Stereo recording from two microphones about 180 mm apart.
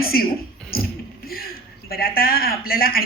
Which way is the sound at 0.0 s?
55° left (ahead or behind).